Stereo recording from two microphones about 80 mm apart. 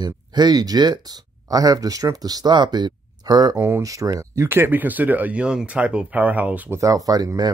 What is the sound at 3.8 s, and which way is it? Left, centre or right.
Speech, right.